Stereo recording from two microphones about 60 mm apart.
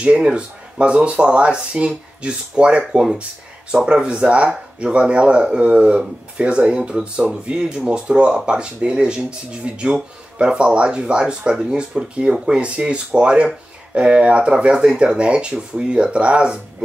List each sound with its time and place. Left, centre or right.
0.0 s speech: centre